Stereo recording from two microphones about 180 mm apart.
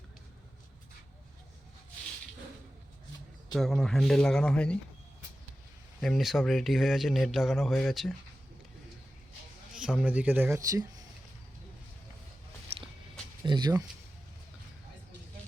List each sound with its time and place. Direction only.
3.5 s speech: centre (ahead or behind)
6.0 s speech: centre (ahead or behind)
10.0 s speech: 10° right (ahead or behind)
13.4 s speech: 25° right (ahead or behind)